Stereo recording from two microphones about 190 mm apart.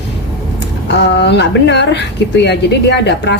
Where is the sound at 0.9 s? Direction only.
65° left (ahead or behind).